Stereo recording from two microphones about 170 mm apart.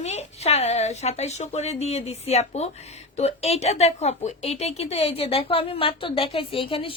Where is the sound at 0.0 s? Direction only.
40° left (ahead or behind).